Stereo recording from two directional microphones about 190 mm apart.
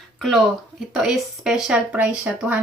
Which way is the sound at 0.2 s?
Centre (ahead or behind).